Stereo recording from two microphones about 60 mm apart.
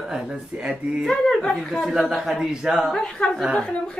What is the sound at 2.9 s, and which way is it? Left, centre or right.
A woman's voice, centre.